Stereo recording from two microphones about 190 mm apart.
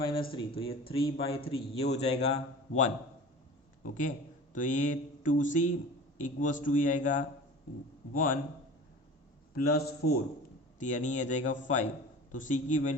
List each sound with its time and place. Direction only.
0.0 s a man's voice: 25° left (ahead or behind); by 8.4 s 45° left (ahead or behind)
9.6 s a man's voice: 55° left (ahead or behind)
10.8 s a man's voice: 40° left (ahead or behind)